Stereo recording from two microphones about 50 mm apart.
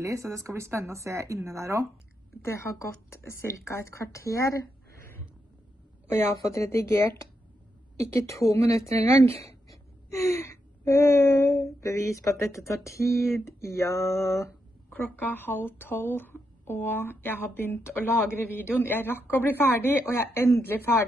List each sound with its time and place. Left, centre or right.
0.0 s speech: right
3.3 s speech: left
6.2 s speech: left
8.0 s speech: left
10.1 s gasp: left
10.9 s speech: left
15.0 s a woman's voice: left
20.3 s a woman's voice: left